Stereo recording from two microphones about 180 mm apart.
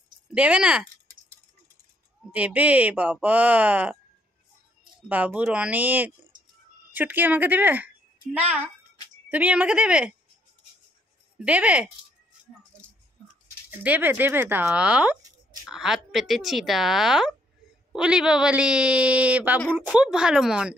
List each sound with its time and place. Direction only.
0.3 s speech: 5° right (ahead or behind)
2.3 s speech: 10° right (ahead or behind)
5.0 s speech: 10° right (ahead or behind)
6.3 s a sound: 45° right (ahead or behind)
6.9 s a woman's voice: 10° right (ahead or behind)
11.3 s speech: 5° right (ahead or behind)
13.7 s speech: 10° right (ahead or behind)